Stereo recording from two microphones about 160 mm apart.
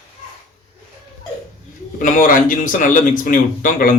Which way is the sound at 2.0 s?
60° left (ahead or behind).